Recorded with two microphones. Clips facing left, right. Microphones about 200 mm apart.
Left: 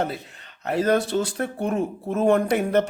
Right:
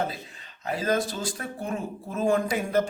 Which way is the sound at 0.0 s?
65° left (ahead or behind).